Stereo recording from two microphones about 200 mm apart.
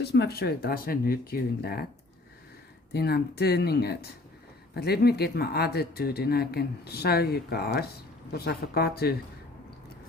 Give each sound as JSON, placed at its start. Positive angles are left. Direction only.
{"t": 0.0, "sound": "speech", "side_deg": 55}
{"t": 2.9, "sound": "speech", "side_deg": 55}